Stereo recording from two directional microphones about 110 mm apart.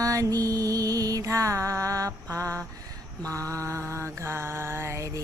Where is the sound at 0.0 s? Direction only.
30° right (ahead or behind).